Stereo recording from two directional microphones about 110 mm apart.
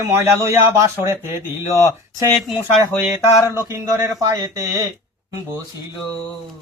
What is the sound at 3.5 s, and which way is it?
Speech, 25° right (ahead or behind).